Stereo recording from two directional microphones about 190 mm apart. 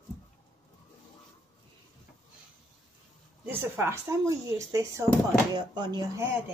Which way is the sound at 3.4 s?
10° right (ahead or behind).